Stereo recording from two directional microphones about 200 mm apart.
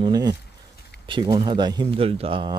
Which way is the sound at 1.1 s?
25° right (ahead or behind).